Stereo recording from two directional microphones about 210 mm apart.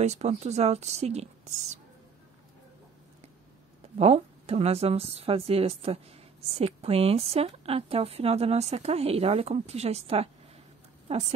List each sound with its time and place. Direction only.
0.0 s speech: 30° right (ahead or behind)
4.0 s a woman's voice: 30° right (ahead or behind)